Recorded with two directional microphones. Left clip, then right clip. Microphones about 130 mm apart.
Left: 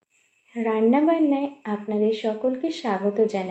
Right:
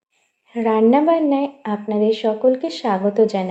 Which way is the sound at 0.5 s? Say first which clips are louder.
Right 6 dB; 35° right (ahead or behind).